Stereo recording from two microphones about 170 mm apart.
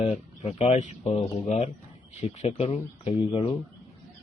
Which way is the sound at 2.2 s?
40° left (ahead or behind).